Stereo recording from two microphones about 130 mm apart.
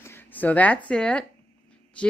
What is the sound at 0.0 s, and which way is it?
Speech, 15° left (ahead or behind).